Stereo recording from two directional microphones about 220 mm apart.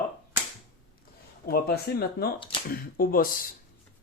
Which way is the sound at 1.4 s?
45° left (ahead or behind).